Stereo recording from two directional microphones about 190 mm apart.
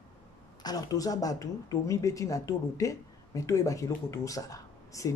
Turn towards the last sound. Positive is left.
turn(degrees=15)  # may be behind; listen again after turning